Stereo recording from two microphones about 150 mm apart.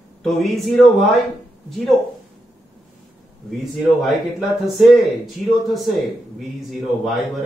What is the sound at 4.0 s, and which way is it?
Speech, centre (ahead or behind).